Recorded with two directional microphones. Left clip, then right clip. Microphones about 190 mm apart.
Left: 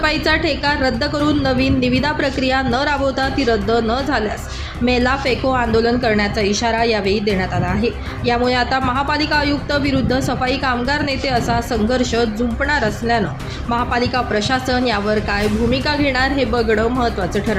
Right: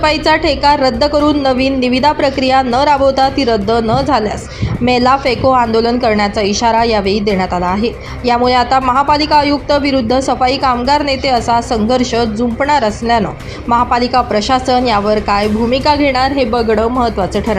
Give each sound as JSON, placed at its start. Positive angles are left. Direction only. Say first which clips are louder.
{"t": 0.0, "sound": "speech", "louder": "right 5 dB", "side_deg": -15}